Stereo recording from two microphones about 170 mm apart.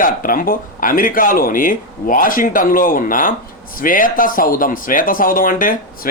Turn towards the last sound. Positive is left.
turn(degrees=55)  # may be behind; listen again after turning